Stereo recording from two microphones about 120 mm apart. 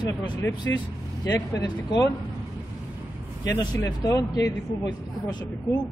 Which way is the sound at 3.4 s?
30° left (ahead or behind).